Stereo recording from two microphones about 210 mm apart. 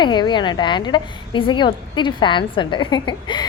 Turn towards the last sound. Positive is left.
turn(degrees=20)  # may be behind; listen again after turning